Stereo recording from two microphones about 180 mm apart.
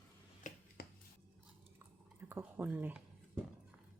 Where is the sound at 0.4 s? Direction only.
45° left (ahead or behind).